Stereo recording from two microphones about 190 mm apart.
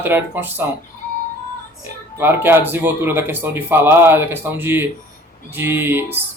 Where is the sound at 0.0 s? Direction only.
10° right (ahead or behind).